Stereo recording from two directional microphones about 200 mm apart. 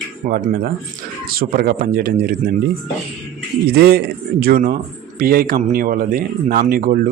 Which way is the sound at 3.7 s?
50° right (ahead or behind).